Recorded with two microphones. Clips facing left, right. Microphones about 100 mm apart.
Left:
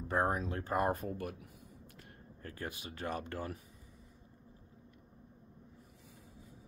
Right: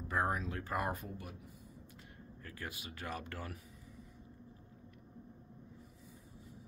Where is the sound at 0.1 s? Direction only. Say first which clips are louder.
Left 3 dB; 35° left (ahead or behind).